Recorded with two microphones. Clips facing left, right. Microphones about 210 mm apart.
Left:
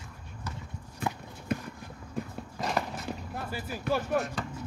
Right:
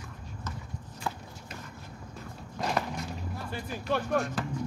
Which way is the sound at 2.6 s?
Centre (ahead or behind).